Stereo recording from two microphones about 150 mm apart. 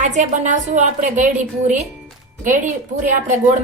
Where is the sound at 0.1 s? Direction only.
55° right (ahead or behind).